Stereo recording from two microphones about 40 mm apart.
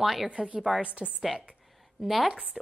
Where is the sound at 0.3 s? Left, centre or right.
Right.